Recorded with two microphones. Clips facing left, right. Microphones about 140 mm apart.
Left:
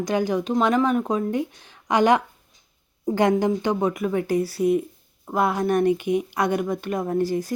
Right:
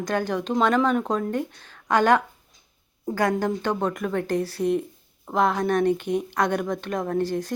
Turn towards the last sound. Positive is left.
turn(degrees=10)  # may be behind; listen again after turning